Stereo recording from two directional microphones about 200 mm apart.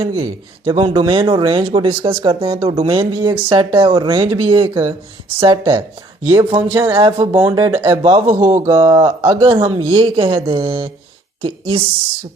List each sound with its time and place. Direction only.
0.2 s speech: 25° right (ahead or behind)
6.3 s speech: 10° right (ahead or behind)